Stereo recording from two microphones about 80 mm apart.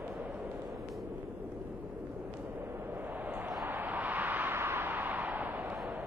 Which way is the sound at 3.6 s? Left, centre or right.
Right.